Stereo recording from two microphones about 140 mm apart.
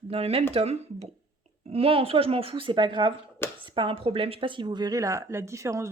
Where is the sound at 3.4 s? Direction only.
15° left (ahead or behind).